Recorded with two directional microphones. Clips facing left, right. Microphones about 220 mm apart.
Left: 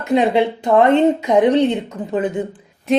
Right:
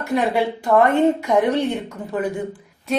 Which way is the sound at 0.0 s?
20° left (ahead or behind).